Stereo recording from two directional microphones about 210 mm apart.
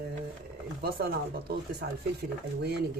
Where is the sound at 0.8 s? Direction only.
45° right (ahead or behind).